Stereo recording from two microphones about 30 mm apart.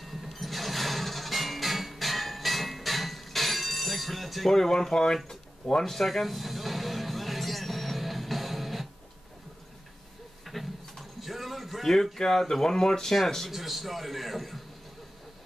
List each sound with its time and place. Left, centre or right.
0.0 s music: centre
4.5 s speech: centre
5.9 s music: centre
10.4 s a sound: centre
11.8 s speech: centre
13.1 s speech: centre
13.5 s a man's voice: centre